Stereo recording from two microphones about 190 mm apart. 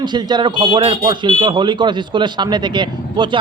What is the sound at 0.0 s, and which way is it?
Speech, 20° right (ahead or behind).